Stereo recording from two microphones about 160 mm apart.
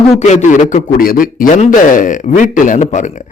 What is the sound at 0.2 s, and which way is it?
A man's voice, 45° left (ahead or behind).